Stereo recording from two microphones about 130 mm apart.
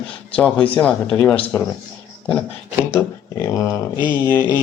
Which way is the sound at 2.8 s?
20° left (ahead or behind).